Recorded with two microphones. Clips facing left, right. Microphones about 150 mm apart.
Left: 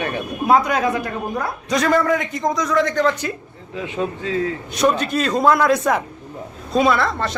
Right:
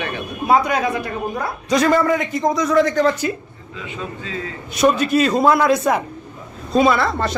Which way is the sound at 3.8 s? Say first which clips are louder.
Left 6 dB; 60° left (ahead or behind).